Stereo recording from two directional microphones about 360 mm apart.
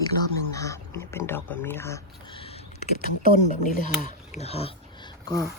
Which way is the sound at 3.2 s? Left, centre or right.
Left.